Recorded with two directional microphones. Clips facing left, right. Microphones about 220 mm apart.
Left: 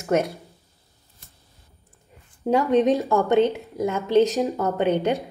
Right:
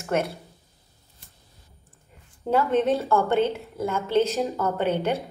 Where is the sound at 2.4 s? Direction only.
15° left (ahead or behind).